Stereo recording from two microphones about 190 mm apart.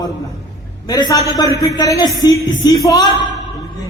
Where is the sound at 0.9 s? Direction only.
20° left (ahead or behind).